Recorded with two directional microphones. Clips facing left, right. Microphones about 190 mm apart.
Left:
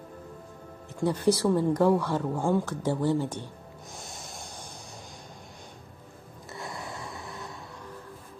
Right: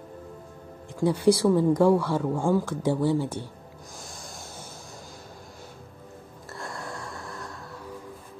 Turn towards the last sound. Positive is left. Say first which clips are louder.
# right 2 dB
turn(degrees=0)  # may be behind; listen again after turning